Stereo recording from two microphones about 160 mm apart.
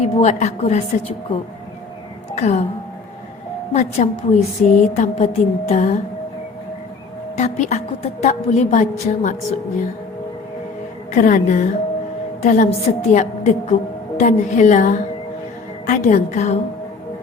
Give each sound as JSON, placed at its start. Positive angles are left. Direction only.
{"t": 0.0, "sound": "a woman's voice", "side_deg": 45}
{"t": 3.7, "sound": "a woman's voice", "side_deg": 45}
{"t": 7.3, "sound": "a woman's voice", "side_deg": 45}
{"t": 11.1, "sound": "a woman's voice", "side_deg": 55}